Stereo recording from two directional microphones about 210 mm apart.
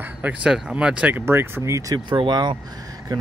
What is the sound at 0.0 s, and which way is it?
Speech, 5° right (ahead or behind).